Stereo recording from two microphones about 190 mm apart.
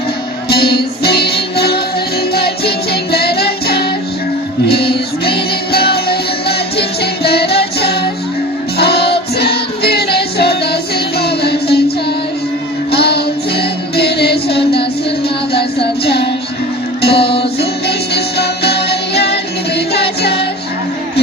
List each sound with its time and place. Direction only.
0.4 s music: 55° left (ahead or behind)
12.9 s child singing: 60° left (ahead or behind)
13.9 s music: 60° left (ahead or behind)